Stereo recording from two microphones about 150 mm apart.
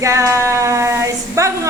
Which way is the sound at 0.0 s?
20° right (ahead or behind).